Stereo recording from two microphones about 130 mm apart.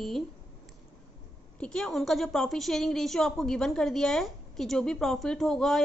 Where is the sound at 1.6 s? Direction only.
5° left (ahead or behind).